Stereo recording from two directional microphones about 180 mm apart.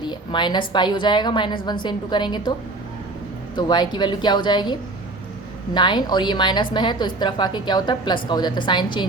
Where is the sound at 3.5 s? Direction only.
25° left (ahead or behind).